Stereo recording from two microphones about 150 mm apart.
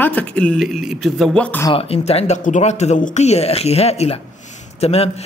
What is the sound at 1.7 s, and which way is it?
Speech, 40° left (ahead or behind).